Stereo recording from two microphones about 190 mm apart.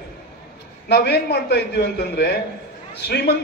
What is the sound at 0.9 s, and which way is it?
A man's voice, 60° left (ahead or behind).